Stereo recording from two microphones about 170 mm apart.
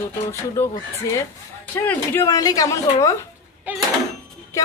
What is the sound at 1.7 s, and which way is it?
Speech, 15° left (ahead or behind).